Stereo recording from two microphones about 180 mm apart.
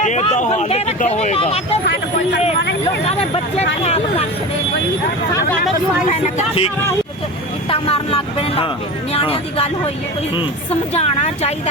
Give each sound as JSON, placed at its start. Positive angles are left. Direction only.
{"t": 0.0, "sound": "speech", "side_deg": 40}
{"t": 1.9, "sound": "speech", "side_deg": 75}
{"t": 3.0, "sound": "speech", "side_deg": 35}
{"t": 6.1, "sound": "speech", "side_deg": 35}
{"t": 7.7, "sound": "speech", "side_deg": 30}
{"t": 10.9, "sound": "speech", "side_deg": 35}